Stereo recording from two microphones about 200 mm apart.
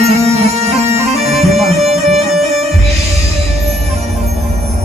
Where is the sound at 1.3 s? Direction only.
30° right (ahead or behind).